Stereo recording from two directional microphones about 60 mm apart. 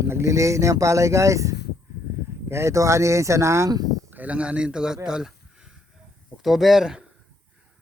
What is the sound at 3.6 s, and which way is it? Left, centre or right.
Speech, right.